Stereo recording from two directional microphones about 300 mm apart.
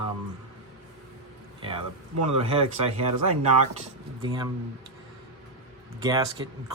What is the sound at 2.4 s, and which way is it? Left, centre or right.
Speech, centre.